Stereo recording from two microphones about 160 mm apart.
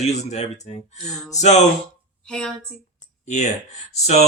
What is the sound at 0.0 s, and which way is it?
Speech, 45° left (ahead or behind).